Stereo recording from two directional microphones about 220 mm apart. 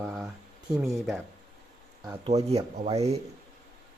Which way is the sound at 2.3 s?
30° right (ahead or behind).